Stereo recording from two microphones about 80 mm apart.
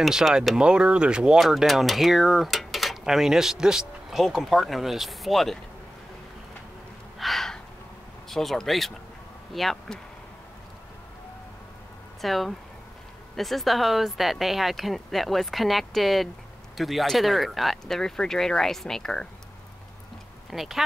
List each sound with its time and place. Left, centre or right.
0.0 s speech: centre
1.4 s speech: centre
7.2 s gasp: centre
8.3 s speech: centre
12.2 s speech: centre
20.4 s speech: centre